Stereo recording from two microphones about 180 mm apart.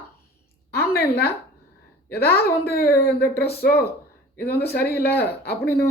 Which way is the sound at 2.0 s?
60° left (ahead or behind).